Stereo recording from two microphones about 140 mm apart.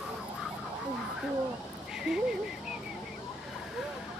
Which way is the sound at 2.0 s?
5° right (ahead or behind).